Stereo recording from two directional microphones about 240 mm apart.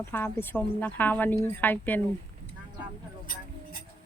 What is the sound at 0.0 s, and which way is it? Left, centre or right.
Speech, centre.